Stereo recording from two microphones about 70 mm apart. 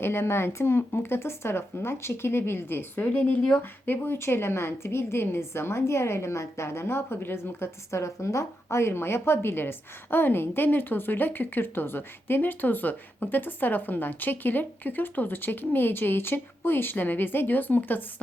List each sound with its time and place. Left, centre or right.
0.0 s a woman's voice: left
3.0 s a woman's voice: left